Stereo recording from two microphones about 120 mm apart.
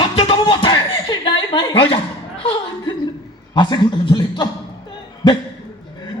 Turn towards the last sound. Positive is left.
turn(degrees=40)  # may be behind; listen again after turning